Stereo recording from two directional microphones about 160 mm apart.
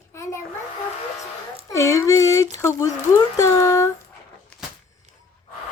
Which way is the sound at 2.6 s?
20° left (ahead or behind).